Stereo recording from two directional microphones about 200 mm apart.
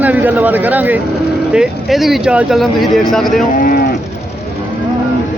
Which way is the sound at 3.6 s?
45° left (ahead or behind).